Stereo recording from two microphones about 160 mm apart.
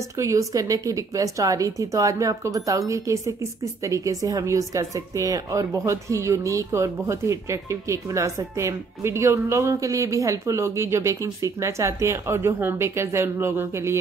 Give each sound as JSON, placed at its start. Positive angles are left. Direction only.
{"t": 0.2, "sound": "speech", "side_deg": -20}